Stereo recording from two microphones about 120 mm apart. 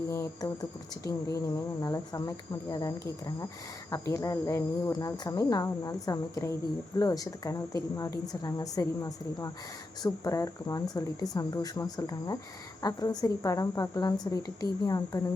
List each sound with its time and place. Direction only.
0.4 s a woman's voice: 30° left (ahead or behind)